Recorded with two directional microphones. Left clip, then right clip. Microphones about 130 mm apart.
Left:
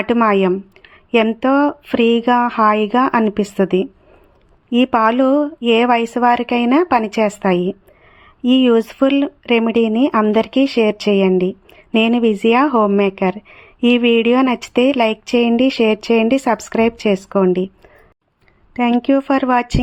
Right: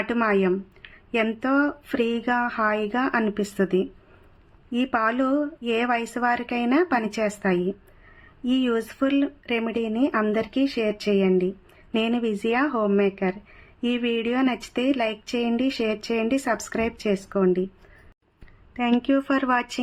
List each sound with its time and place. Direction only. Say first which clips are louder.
0.0 s speech: left 8 dB; 50° left (ahead or behind)
18.7 s speech: left 8 dB; 45° left (ahead or behind)